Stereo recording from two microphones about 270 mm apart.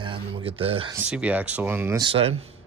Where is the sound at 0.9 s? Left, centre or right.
Centre; by 2.4 s right.